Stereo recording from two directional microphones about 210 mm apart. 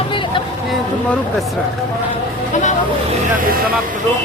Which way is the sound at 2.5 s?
35° left (ahead or behind).